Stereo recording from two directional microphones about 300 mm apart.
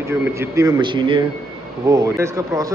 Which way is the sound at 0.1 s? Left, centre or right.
Centre.